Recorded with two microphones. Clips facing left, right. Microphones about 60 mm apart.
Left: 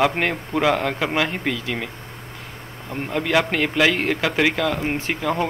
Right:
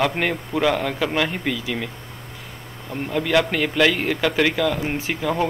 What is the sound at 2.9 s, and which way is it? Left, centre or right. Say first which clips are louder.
A man's voice: right 1 dB; centre.